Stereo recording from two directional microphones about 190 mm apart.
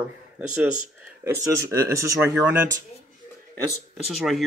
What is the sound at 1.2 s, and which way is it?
Speech, 15° right (ahead or behind).